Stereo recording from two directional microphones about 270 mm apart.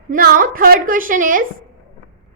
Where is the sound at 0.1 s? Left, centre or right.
Right.